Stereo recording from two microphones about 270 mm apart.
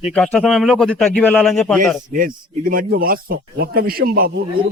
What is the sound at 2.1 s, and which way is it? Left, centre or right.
A man's voice, right.